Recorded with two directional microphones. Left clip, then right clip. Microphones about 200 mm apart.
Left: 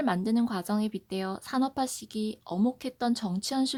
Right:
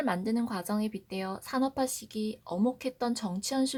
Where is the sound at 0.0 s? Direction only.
40° left (ahead or behind).